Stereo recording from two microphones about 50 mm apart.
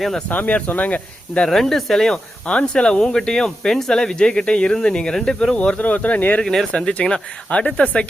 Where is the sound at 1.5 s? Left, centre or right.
Centre.